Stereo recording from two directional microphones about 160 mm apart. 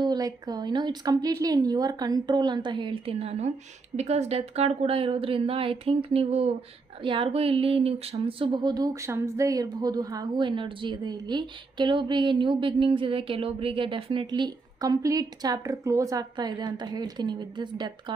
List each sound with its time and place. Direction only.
0.0 s a woman's voice: 25° right (ahead or behind)
8.5 s a woman's voice: 25° right (ahead or behind)